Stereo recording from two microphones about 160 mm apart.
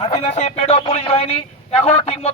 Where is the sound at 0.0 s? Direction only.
45° left (ahead or behind).